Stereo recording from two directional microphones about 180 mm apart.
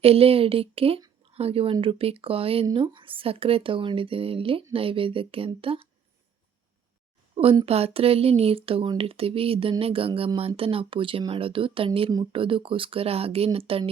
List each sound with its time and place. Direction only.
0.0 s speech: 35° right (ahead or behind)
7.5 s speech: 35° right (ahead or behind)